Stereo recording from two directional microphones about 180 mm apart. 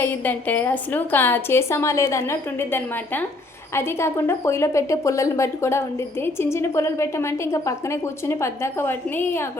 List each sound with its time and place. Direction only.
0.0 s a woman's voice: 10° left (ahead or behind)